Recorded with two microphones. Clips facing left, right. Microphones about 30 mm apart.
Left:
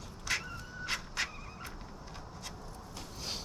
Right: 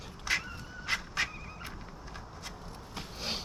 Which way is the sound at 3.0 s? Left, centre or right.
Right.